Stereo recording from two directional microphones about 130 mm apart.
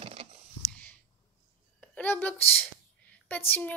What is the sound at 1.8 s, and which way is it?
Speech, 10° left (ahead or behind).